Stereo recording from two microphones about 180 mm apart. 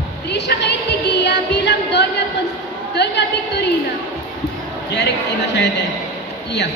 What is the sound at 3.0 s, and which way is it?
Speech, 70° left (ahead or behind).